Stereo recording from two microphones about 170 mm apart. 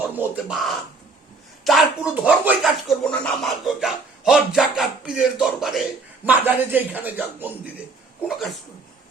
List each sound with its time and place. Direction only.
0.1 s speech: 10° right (ahead or behind)
3.0 s speech: 5° left (ahead or behind)
6.2 s speech: 10° right (ahead or behind)